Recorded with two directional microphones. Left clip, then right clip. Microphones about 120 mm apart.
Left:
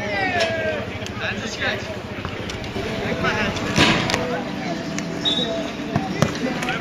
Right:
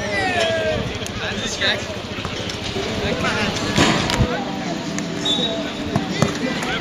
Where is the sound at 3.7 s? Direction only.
Centre (ahead or behind).